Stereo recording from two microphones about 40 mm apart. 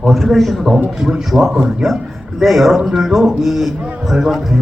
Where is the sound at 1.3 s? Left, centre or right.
Centre.